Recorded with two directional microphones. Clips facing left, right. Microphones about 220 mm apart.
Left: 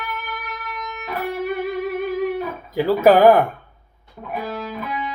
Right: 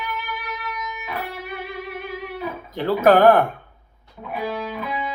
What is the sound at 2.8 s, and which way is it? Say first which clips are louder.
Speech: left 2 dB; 5° left (ahead or behind).